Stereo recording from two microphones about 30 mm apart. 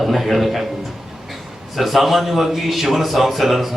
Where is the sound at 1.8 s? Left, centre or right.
Centre.